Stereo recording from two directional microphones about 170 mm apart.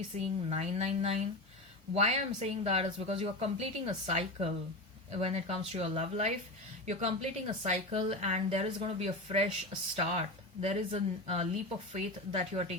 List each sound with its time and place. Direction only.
0.1 s a woman's voice: 40° right (ahead or behind)